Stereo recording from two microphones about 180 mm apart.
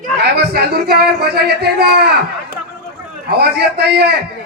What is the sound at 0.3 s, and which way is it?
Speech, 65° right (ahead or behind).